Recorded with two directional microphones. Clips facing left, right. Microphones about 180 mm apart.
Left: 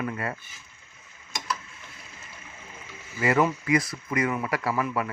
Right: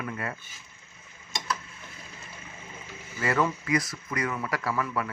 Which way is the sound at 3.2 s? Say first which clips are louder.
Left 4 dB; 20° left (ahead or behind).